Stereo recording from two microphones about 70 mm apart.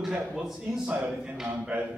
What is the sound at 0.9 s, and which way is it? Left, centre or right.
A man's voice, right.